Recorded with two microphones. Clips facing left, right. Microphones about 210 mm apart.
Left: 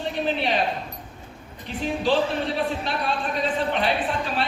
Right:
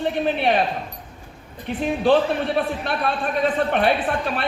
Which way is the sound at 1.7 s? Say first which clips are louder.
Right 5 dB; 55° right (ahead or behind).